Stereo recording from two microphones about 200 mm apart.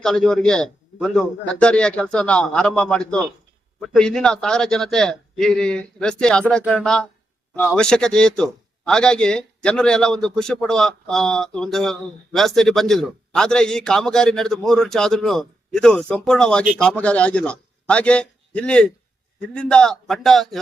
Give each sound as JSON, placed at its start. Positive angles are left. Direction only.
{"t": 0.0, "sound": "a man's voice", "side_deg": 0}